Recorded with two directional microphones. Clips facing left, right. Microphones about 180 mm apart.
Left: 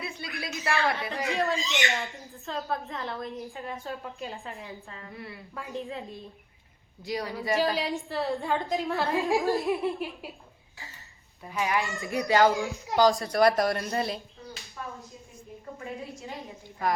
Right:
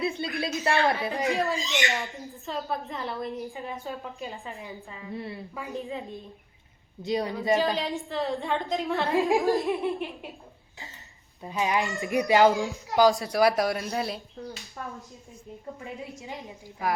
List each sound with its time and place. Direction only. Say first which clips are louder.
0.4 s a woman's voice: right 3 dB; 25° right (ahead or behind)
1.3 s a woman's voice: left 2 dB; centre (ahead or behind)
5.1 s a woman's voice: right 8 dB; 25° right (ahead or behind)
5.5 s a woman's voice: even; centre (ahead or behind)
7.0 s a woman's voice: right 4 dB; 20° right (ahead or behind)
7.8 s a woman's voice: even; centre (ahead or behind)
11.4 s speech: right 2 dB; 20° right (ahead or behind)
13.0 s a woman's voice: right 1 dB; 5° right (ahead or behind)
15.8 s speech: left 1 dB; 15° right (ahead or behind)